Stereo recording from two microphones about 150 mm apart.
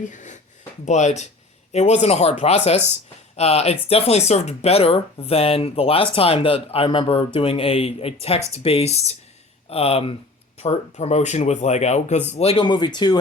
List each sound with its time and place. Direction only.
0.0 s speech: 55° left (ahead or behind); by 13.1 s 30° left (ahead or behind)